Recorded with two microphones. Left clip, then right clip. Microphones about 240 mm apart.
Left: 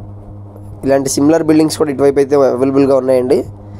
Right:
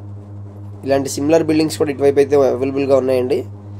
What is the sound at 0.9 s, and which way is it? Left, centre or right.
Speech, left.